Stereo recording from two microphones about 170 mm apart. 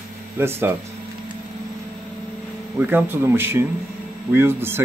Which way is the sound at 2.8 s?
10° right (ahead or behind).